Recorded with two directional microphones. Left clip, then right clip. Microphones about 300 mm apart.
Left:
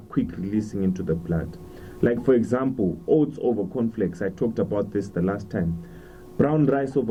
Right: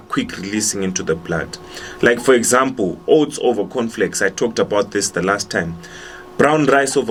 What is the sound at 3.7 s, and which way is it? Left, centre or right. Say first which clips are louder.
Speech: right 8 dB; centre.